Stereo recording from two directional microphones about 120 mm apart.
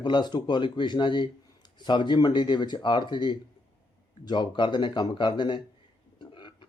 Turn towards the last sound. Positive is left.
turn(degrees=45)  # may be behind; listen again after turning